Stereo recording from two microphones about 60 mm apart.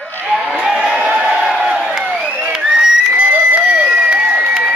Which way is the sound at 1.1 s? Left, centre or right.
Centre.